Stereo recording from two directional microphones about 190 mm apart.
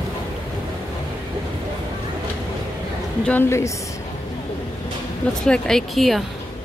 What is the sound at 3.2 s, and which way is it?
Speech, 10° left (ahead or behind).